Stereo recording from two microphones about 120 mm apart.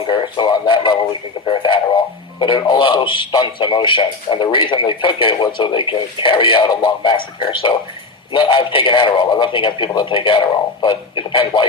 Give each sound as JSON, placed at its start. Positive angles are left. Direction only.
{"t": 0.1, "sound": "a man's voice", "side_deg": 40}